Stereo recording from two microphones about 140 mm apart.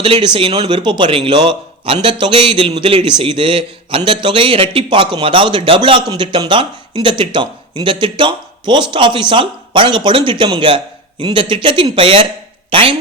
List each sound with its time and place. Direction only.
0.0 s speech: 40° right (ahead or behind)